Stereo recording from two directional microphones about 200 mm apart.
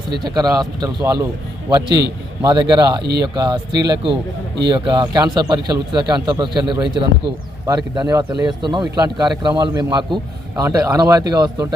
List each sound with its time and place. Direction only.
0.1 s speech: 20° right (ahead or behind)
1.9 s speech: 55° right (ahead or behind)
2.4 s speech: 20° right (ahead or behind)
3.0 s speech: 55° right (ahead or behind)
3.3 s speech: 20° right (ahead or behind)